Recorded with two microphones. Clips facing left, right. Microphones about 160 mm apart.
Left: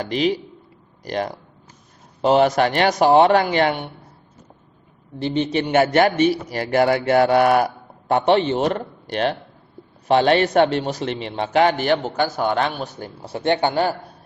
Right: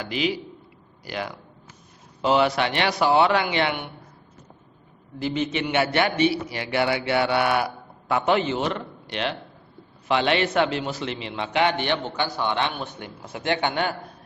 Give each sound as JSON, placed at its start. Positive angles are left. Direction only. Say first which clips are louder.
{"t": 0.0, "sound": "a man's voice", "louder": "left 5 dB", "side_deg": 40}
{"t": 5.2, "sound": "a man's voice", "louder": "left 4 dB", "side_deg": 30}